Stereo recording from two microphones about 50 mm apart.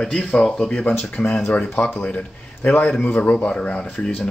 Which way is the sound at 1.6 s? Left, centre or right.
Left.